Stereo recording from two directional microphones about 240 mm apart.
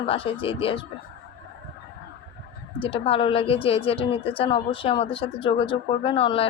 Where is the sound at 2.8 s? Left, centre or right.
Left.